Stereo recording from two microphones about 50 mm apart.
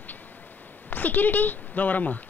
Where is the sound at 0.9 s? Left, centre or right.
Left.